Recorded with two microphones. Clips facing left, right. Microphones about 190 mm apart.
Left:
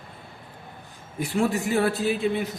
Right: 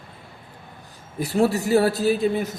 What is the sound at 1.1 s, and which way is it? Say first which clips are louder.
A man's voice: right 4 dB; 35° right (ahead or behind).